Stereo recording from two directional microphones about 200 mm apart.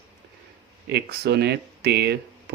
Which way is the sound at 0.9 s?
55° right (ahead or behind).